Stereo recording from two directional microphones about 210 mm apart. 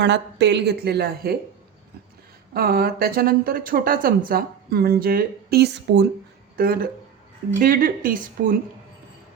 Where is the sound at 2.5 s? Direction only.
45° right (ahead or behind).